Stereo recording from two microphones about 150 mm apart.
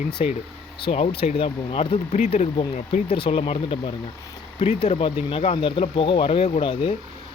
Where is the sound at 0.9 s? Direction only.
40° left (ahead or behind).